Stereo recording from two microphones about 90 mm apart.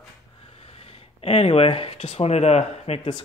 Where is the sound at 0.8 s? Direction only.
90° left.